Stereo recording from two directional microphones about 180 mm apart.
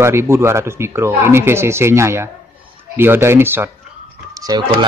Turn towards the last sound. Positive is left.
turn(degrees=-20)  # may be behind; listen again after turning